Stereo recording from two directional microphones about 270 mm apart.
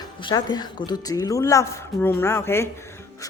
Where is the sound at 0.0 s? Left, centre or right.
Centre.